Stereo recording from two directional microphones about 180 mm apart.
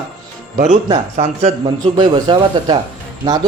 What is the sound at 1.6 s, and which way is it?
A man's voice, 25° right (ahead or behind).